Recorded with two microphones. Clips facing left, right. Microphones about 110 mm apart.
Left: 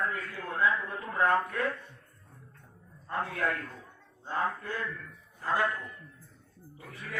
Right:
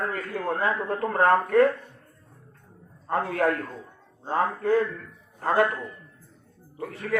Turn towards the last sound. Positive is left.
turn(degrees=-80)